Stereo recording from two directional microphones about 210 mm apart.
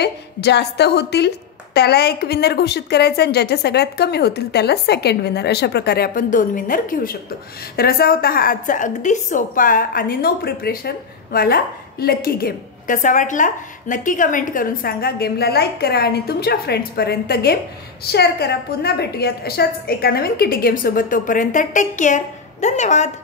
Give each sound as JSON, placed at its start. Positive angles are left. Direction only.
{"t": 0.0, "sound": "a woman's voice", "side_deg": 50}